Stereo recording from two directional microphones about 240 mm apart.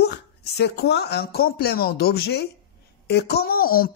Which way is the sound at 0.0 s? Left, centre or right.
Left.